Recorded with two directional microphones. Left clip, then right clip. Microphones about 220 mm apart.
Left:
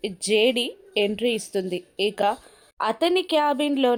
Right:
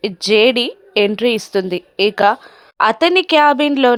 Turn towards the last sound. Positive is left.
turn(degrees=-15)  # may be behind; listen again after turning